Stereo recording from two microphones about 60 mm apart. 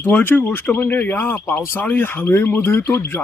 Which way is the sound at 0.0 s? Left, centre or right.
Left.